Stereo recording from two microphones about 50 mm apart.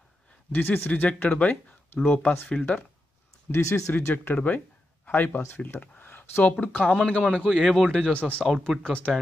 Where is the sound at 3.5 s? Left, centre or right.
Left.